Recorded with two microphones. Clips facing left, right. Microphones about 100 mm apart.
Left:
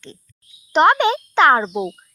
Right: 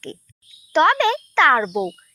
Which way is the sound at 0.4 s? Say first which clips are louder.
Left 2 dB; 20° left (ahead or behind).